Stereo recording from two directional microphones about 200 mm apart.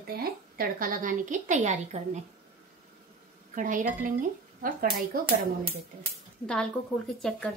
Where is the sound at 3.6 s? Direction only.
40° right (ahead or behind).